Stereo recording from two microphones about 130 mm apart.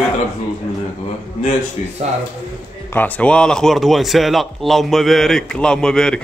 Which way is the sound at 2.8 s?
15° left (ahead or behind).